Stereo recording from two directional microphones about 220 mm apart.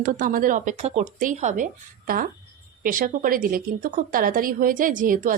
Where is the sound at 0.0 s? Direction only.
40° right (ahead or behind).